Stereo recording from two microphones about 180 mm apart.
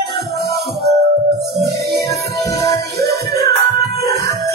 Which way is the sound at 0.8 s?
65° right (ahead or behind).